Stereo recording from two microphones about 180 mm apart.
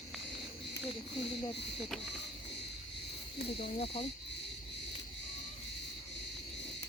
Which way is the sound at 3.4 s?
35° left (ahead or behind).